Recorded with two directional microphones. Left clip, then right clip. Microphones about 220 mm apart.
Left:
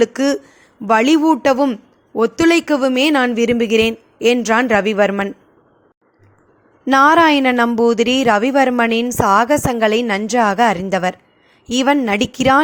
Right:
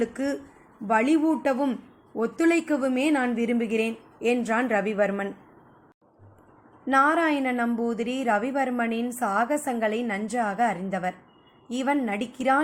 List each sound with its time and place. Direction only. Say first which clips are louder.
0.0 s speech: left 12 dB; 45° left (ahead or behind)
6.8 s speech: left 11 dB; 45° left (ahead or behind)